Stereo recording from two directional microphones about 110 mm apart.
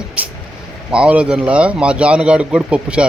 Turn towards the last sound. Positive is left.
turn(degrees=-10)  # may be behind; listen again after turning